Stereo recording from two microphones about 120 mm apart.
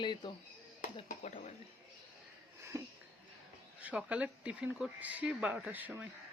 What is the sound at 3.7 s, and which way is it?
Speech, 10° right (ahead or behind).